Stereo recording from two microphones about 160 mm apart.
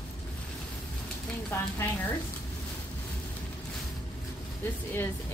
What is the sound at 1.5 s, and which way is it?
Speech, 15° left (ahead or behind).